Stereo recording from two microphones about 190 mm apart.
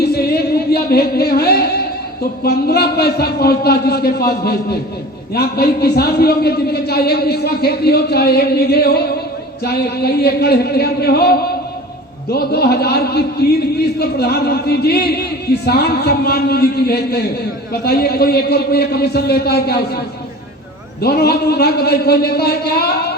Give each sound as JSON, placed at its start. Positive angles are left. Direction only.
{"t": 0.0, "sound": "music", "side_deg": 55}
{"t": 2.4, "sound": "a man's voice", "side_deg": 55}
{"t": 21.0, "sound": "a man's voice", "side_deg": 55}